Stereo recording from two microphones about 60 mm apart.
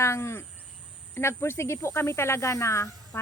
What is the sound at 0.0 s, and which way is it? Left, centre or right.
Speech, left.